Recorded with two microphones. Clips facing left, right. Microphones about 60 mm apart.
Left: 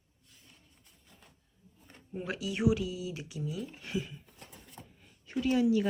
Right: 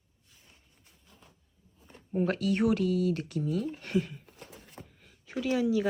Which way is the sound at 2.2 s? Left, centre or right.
Right.